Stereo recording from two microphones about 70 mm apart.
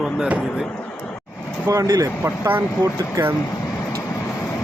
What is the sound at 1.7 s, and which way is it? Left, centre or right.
Speech, right.